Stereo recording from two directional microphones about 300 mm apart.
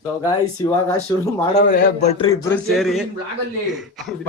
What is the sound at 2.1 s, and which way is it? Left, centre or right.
Speech, centre.